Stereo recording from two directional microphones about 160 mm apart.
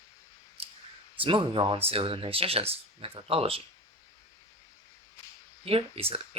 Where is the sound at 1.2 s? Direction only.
35° right (ahead or behind).